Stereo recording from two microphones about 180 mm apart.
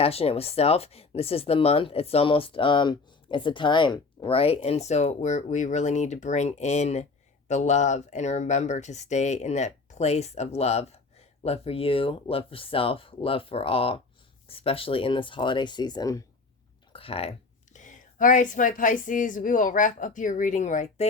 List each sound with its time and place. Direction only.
0.0 s speech: 35° left (ahead or behind)
16.9 s speech: 30° left (ahead or behind)
17.7 s a woman's voice: 45° left (ahead or behind)